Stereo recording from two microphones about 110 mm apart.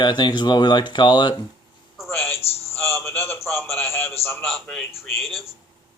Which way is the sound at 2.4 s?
65° left (ahead or behind).